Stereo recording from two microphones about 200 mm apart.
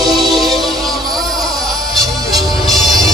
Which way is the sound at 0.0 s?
Centre (ahead or behind).